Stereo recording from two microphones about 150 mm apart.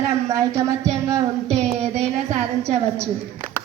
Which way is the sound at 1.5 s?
45° right (ahead or behind).